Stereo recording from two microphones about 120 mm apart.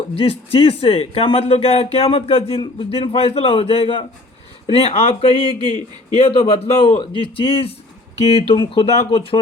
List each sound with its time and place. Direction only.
0.1 s speech: 50° left (ahead or behind)
5.6 s a man's voice: 40° right (ahead or behind)
6.1 s speech: 50° left (ahead or behind)